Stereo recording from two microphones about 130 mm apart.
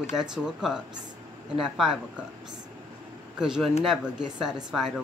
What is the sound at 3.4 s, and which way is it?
Speech, 5° right (ahead or behind).